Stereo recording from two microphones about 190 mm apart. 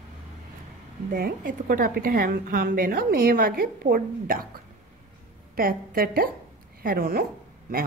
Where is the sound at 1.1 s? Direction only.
50° right (ahead or behind).